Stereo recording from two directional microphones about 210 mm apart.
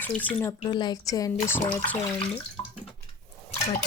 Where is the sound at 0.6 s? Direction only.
20° left (ahead or behind).